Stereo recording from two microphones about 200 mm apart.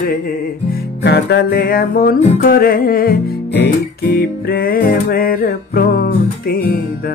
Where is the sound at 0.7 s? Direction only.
55° left (ahead or behind).